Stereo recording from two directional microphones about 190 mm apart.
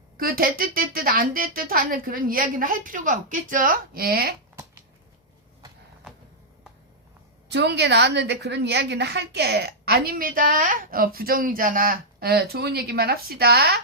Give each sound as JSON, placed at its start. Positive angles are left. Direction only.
{"t": 0.2, "sound": "speech", "side_deg": -50}
{"t": 7.5, "sound": "a woman's voice", "side_deg": -60}